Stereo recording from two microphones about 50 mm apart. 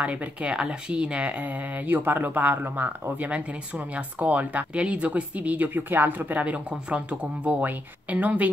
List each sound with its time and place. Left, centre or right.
0.0 s speech: right
3.3 s speech: right